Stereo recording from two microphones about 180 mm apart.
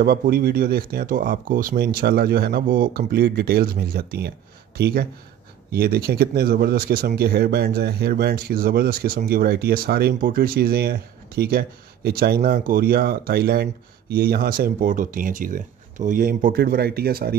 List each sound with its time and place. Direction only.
0.0 s speech: 55° right (ahead or behind)